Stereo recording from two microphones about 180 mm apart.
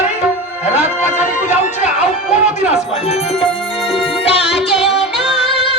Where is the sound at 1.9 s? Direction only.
5° right (ahead or behind).